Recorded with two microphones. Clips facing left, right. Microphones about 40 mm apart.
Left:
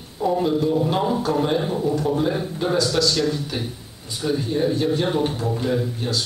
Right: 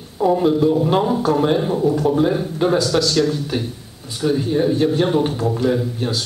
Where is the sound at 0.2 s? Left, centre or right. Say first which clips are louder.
Right 5 dB; centre.